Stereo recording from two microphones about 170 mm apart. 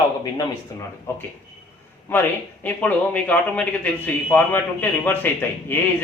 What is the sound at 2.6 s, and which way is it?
A man's voice, 10° left (ahead or behind).